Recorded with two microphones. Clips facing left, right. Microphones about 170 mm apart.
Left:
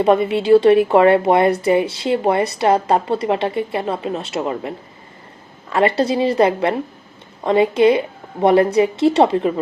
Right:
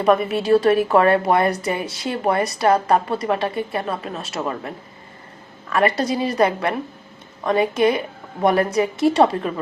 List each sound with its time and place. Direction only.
0.0 s speech: 25° left (ahead or behind)
5.7 s speech: 25° left (ahead or behind)